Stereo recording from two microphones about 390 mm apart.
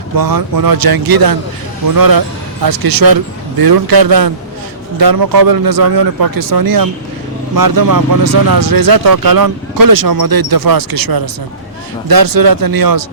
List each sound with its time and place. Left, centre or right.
0.2 s speech: right